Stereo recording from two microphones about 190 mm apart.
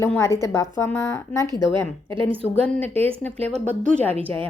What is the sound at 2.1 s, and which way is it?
A woman's voice, 25° right (ahead or behind).